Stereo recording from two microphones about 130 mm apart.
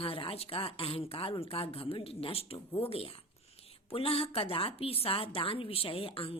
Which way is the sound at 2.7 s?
15° left (ahead or behind).